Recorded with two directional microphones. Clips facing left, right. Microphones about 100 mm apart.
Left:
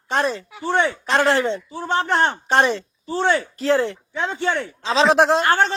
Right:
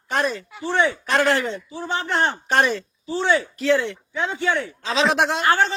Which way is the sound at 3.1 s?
55° left (ahead or behind).